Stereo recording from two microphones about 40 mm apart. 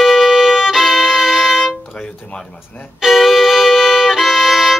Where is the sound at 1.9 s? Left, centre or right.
Centre.